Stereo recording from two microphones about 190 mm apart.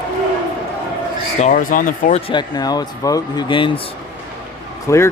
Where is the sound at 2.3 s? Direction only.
20° left (ahead or behind).